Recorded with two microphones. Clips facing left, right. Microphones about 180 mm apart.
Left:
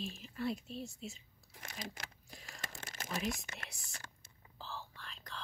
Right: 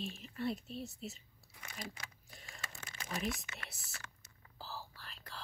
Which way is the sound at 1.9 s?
Centre (ahead or behind).